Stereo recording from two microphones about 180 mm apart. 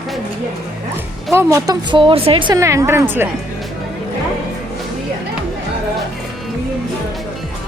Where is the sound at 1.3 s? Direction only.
15° right (ahead or behind).